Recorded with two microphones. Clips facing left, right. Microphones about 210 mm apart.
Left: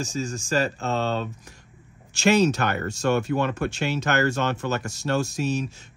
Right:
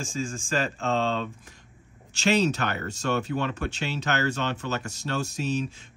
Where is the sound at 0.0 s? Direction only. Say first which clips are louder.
Left 3 dB; 40° left (ahead or behind).